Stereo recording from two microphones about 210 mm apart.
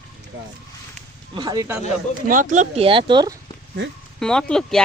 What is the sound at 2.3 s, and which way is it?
Speech, 40° right (ahead or behind).